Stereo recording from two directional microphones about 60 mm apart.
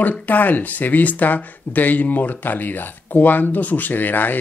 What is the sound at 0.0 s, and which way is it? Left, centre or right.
Speech, left.